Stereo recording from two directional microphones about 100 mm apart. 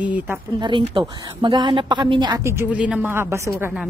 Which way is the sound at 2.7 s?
10° right (ahead or behind).